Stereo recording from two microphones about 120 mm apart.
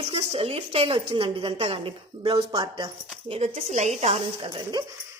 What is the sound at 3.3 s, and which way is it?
Speech, 55° right (ahead or behind).